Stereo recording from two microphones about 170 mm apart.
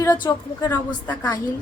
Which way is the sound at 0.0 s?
25° left (ahead or behind).